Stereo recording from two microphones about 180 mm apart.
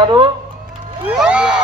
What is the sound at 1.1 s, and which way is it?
Crowd, 5° right (ahead or behind).